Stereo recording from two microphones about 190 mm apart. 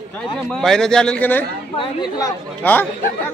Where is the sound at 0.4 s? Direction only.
Centre (ahead or behind).